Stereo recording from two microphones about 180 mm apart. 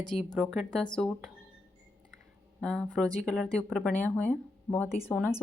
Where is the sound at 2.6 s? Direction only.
5° left (ahead or behind).